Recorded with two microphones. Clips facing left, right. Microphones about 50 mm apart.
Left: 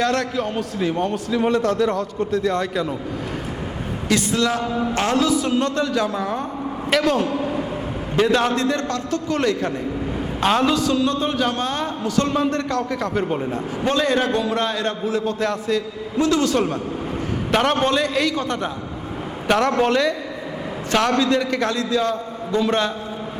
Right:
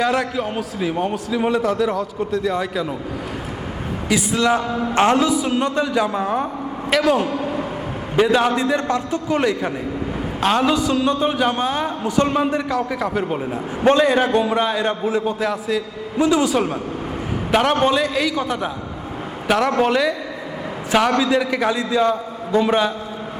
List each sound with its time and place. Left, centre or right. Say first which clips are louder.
0.0 s a man's voice: right 1 dB; centre
4.1 s a man's voice: right 2 dB; centre
4.5 s a man's voice: right 2 dB; right
4.9 s a sound: right 4 dB; right
5.5 s a man's voice: right 1 dB; centre
6.9 s a man's voice: right 1 dB; centre
7.3 s a sound: even; right
8.1 s a man's voice: right 2 dB; centre
11.0 s a man's voice: right 2 dB; centre
14.3 s a sound: right 3 dB; right
14.5 s a man's voice: right 3 dB; centre
15.0 s a sound: right 2 dB; centre
15.4 s a man's voice: even; centre
21.2 s a man's voice: right 1 dB; centre